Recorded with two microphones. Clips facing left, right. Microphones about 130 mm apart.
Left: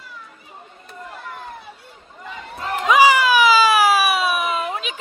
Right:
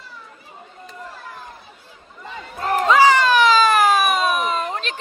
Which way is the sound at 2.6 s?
45° right (ahead or behind).